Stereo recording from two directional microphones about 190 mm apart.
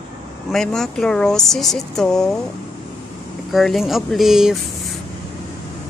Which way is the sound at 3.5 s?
Centre (ahead or behind).